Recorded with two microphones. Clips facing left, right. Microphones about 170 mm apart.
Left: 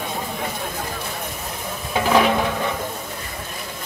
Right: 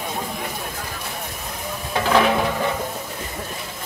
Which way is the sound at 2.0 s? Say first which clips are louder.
Left 1 dB; 5° left (ahead or behind).